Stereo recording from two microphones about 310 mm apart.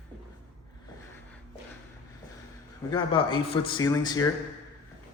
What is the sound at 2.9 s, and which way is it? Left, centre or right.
A man's voice, centre.